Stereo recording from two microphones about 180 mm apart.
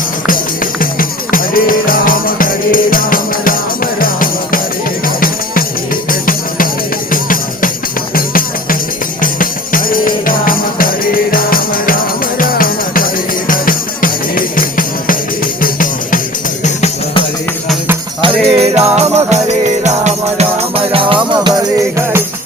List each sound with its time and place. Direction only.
0.3 s music: 50° left (ahead or behind)
18.2 s music: 30° right (ahead or behind)